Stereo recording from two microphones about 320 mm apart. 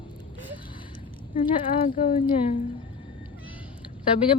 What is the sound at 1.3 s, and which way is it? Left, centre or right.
Speech, centre.